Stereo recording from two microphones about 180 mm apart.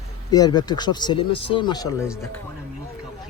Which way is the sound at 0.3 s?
20° left (ahead or behind).